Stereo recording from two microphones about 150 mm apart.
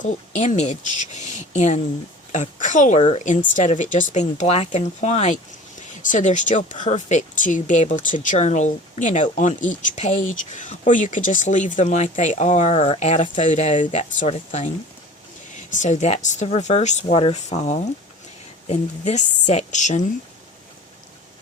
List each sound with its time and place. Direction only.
0.0 s speech: 55° left (ahead or behind)